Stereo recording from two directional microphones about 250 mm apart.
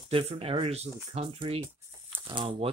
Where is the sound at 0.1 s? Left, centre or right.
Right.